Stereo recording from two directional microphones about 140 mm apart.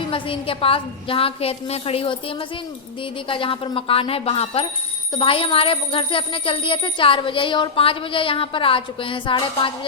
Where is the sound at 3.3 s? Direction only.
40° left (ahead or behind).